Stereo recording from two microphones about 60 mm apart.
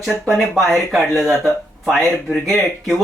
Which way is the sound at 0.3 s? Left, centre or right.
Centre.